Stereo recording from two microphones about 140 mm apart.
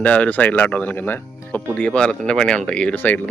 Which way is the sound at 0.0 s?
10° left (ahead or behind).